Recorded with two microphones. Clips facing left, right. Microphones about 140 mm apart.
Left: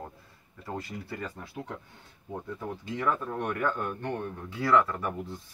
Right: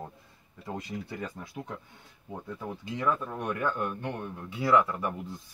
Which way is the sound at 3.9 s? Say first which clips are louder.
Left 2 dB; 10° right (ahead or behind).